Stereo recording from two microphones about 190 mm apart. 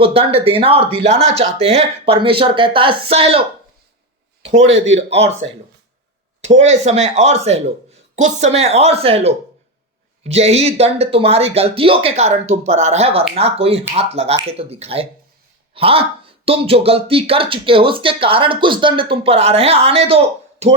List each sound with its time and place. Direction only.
0.0 s speech: 30° right (ahead or behind)
4.6 s a man's voice: 80° right
4.9 s speech: 35° right (ahead or behind)